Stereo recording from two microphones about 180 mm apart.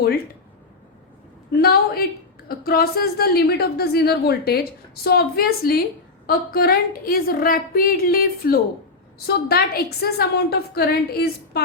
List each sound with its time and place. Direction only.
1.5 s a woman's voice: 60° left (ahead or behind)